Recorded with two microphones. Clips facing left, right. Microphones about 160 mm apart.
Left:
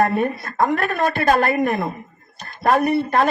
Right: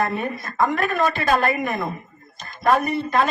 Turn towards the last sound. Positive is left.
turn(degrees=55)  # may be behind; listen again after turning